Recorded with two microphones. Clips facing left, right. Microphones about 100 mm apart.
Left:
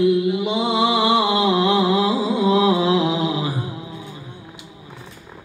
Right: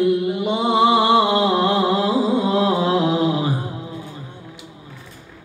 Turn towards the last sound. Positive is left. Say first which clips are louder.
# right 3 dB
turn(degrees=-45)  # may be behind; listen again after turning